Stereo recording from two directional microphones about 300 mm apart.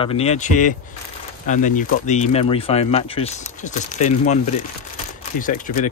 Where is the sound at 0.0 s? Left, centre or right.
Centre.